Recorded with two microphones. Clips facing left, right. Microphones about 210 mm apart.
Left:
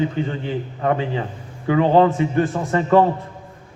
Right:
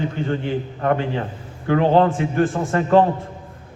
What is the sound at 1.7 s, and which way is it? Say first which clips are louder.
Speech: left 1 dB; 50° right (ahead or behind).